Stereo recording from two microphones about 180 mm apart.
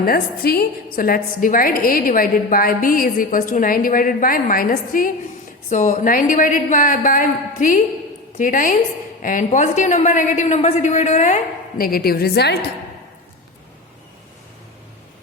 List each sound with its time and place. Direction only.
0.0 s a woman's voice: 55° left (ahead or behind)
11.8 s a woman's voice: 55° left (ahead or behind)